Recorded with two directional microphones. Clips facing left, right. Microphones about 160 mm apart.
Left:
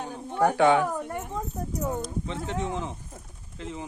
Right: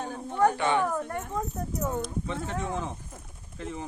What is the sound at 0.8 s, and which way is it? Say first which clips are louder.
Speech: left 1 dB; 15° left (ahead or behind).